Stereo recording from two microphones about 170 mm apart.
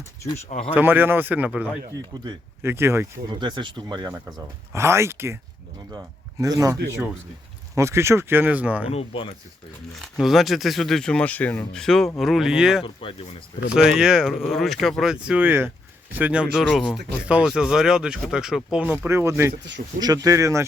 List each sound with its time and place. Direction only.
0.7 s speech: 10° right (ahead or behind)
3.2 s speech: 25° right (ahead or behind)
6.4 s speech: 20° right (ahead or behind)
7.8 s speech: 15° right (ahead or behind)
8.9 s speech: 35° left (ahead or behind)
10.0 s speech: centre (ahead or behind)
12.8 s speech: 30° left (ahead or behind)
13.7 s speech: 5° right (ahead or behind)
19.8 s speech: 45° right (ahead or behind)
20.2 s speech: 20° right (ahead or behind)